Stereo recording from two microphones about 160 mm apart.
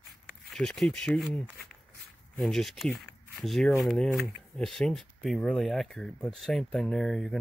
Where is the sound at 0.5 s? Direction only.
Centre (ahead or behind).